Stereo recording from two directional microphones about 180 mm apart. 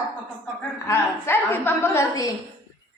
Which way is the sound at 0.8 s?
15° left (ahead or behind).